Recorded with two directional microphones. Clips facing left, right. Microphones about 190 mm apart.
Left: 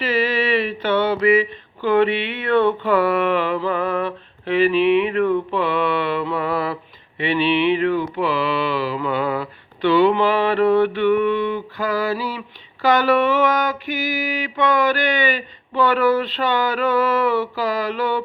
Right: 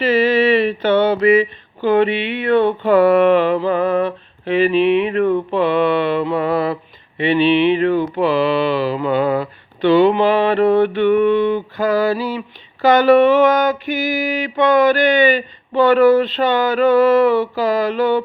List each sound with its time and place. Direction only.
0.0 s mantra: 25° right (ahead or behind)